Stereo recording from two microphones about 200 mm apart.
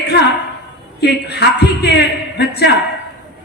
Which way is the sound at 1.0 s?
55° left (ahead or behind).